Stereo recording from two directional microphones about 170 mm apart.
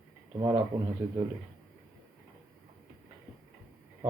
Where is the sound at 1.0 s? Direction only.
30° right (ahead or behind).